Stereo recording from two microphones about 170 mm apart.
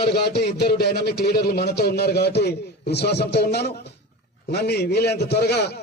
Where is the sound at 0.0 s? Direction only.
70° left (ahead or behind).